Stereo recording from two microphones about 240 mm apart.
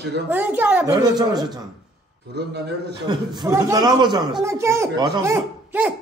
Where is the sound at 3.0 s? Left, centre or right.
Centre.